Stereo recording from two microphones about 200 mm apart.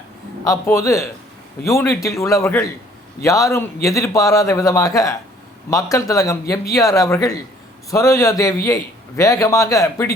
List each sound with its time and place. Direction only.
0.4 s a man's voice: 15° left (ahead or behind)